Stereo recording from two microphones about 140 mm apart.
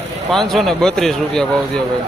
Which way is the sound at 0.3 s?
Centre (ahead or behind).